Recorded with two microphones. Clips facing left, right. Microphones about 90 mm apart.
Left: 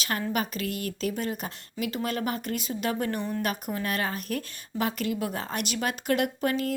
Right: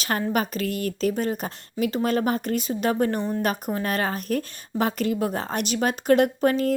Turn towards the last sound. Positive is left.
turn(degrees=-35)  # may be behind; listen again after turning